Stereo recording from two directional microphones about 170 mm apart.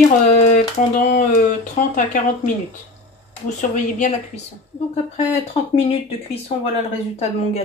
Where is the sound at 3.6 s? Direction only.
45° left (ahead or behind).